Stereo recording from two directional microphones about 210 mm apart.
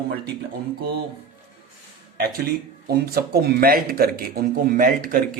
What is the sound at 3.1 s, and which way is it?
A man's voice, 45° right (ahead or behind).